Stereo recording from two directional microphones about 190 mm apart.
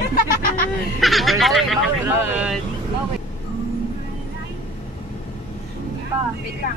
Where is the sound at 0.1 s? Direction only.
50° left (ahead or behind).